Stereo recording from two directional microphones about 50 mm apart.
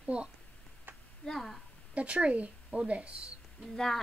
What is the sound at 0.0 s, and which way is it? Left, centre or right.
Speech, right.